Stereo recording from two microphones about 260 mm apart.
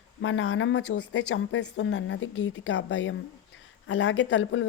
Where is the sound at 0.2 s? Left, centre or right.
Left.